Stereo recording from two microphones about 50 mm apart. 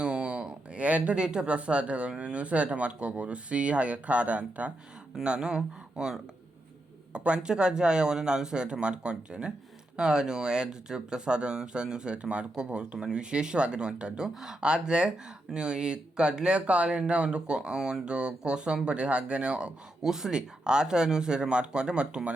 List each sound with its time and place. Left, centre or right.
0.0 s speech: right
20.0 s speech: centre